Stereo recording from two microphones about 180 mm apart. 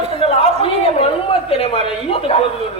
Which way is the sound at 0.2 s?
35° left (ahead or behind).